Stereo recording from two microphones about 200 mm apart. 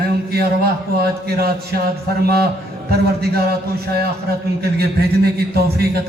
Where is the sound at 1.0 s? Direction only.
50° right (ahead or behind).